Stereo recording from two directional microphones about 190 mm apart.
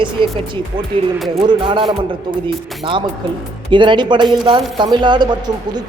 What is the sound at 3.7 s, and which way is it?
Speech, 25° right (ahead or behind).